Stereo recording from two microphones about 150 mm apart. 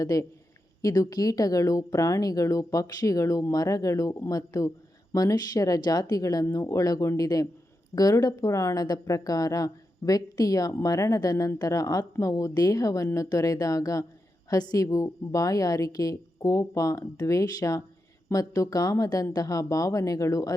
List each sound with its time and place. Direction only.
0.0 s a woman's voice: 20° left (ahead or behind)